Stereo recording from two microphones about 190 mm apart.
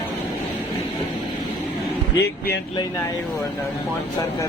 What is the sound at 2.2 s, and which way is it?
Speech, 55° left (ahead or behind).